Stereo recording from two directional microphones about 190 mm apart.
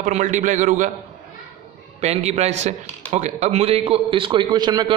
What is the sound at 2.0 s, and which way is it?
A man's voice, 35° right (ahead or behind).